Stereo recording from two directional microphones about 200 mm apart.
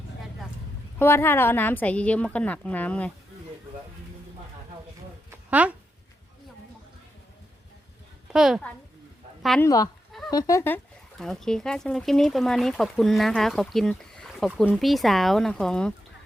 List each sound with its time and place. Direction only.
0.9 s a woman's voice: 10° left (ahead or behind)
5.5 s speech: 5° right (ahead or behind)
8.3 s a child's voice: 5° right (ahead or behind)
9.6 s a woman's voice: 15° left (ahead or behind)
10.1 s a sound: centre (ahead or behind)
10.3 s a woman's voice: 15° left (ahead or behind)
11.2 s speech: centre (ahead or behind)